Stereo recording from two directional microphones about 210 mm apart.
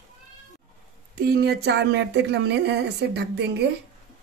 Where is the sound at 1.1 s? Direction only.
50° right (ahead or behind).